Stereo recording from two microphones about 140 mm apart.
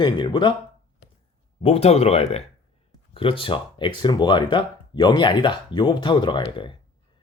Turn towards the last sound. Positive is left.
turn(degrees=35)  # may be behind; listen again after turning